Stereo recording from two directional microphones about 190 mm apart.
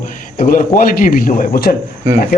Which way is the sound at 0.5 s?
45° left (ahead or behind).